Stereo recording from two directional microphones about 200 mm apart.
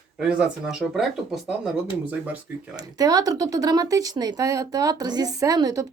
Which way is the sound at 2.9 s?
20° right (ahead or behind).